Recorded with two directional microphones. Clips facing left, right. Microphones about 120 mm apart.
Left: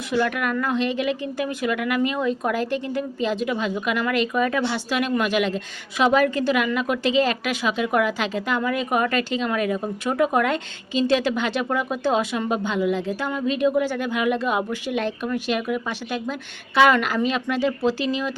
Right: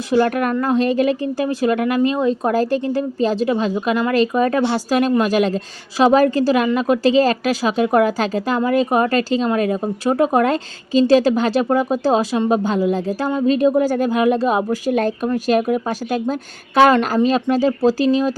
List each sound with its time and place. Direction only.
0.1 s a woman's voice: 40° right (ahead or behind)